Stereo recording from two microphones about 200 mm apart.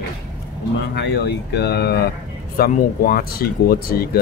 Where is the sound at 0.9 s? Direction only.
55° left (ahead or behind).